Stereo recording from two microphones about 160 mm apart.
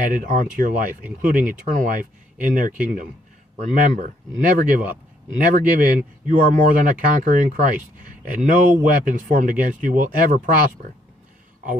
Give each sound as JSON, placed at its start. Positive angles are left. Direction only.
{"t": 0.0, "sound": "speech", "side_deg": -55}